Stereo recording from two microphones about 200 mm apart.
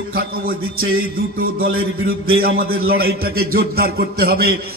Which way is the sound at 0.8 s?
90° right.